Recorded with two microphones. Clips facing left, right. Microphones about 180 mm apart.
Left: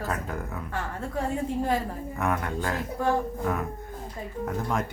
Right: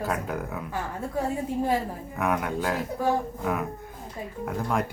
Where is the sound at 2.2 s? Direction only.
5° right (ahead or behind).